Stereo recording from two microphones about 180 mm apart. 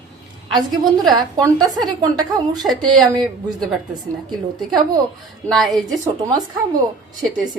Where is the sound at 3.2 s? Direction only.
Centre (ahead or behind).